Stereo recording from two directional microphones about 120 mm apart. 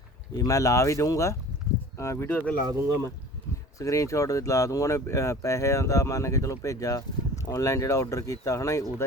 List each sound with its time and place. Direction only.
0.3 s speech: 30° left (ahead or behind)
3.8 s speech: 25° left (ahead or behind)